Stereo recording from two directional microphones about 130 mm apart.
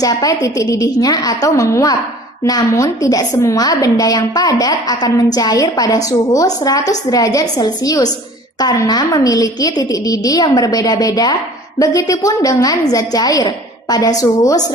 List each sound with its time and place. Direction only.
0.0 s a woman's voice: 30° left (ahead or behind)